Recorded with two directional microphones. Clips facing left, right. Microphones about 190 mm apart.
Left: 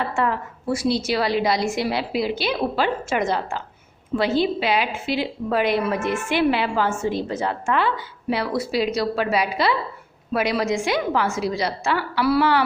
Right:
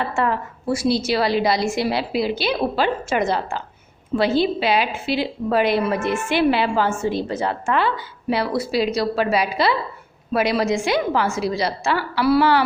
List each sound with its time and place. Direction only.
0.2 s a woman's voice: 30° right (ahead or behind)